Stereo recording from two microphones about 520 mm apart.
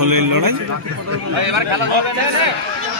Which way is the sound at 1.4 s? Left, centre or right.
Right.